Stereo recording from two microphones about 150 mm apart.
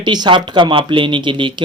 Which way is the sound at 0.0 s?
30° right (ahead or behind).